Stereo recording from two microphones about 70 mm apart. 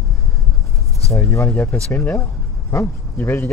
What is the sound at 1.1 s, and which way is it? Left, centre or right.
Speech, left.